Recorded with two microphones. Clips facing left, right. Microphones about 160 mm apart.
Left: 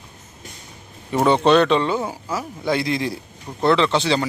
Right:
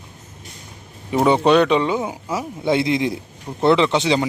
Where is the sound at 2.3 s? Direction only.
20° right (ahead or behind).